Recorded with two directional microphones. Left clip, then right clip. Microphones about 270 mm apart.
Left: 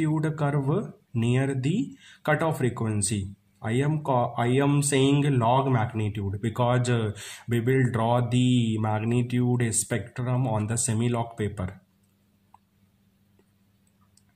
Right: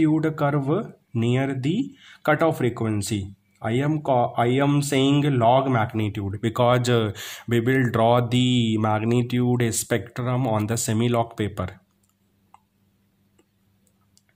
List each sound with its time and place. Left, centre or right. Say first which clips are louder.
0.0 s a man's voice: right 6 dB; right